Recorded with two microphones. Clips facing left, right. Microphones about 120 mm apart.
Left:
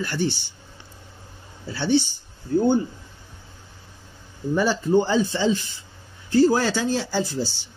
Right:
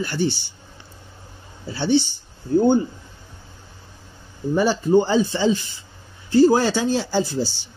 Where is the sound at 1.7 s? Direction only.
20° right (ahead or behind).